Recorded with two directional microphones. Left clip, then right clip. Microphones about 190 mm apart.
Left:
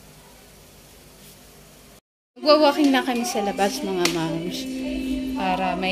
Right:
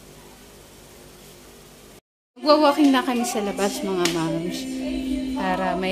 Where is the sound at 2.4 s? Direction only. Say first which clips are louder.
Even; 10° right (ahead or behind).